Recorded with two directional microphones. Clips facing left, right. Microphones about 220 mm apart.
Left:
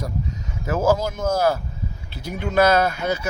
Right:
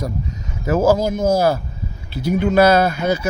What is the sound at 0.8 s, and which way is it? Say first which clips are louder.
Speech: right 4 dB; 35° right (ahead or behind).